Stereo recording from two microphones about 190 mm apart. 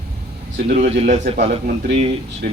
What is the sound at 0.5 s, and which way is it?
Speech, 50° right (ahead or behind).